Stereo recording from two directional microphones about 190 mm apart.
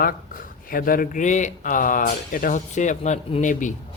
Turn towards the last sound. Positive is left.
turn(degrees=45)  # may be behind; listen again after turning